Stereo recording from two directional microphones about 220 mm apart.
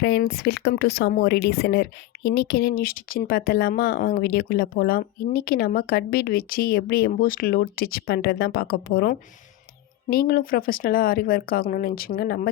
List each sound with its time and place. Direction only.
0.0 s speech: 50° left (ahead or behind)